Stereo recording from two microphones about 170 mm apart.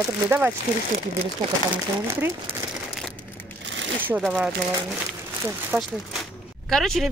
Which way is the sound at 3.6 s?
90° right.